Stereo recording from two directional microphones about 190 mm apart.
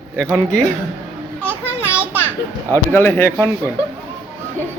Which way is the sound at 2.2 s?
10° left (ahead or behind).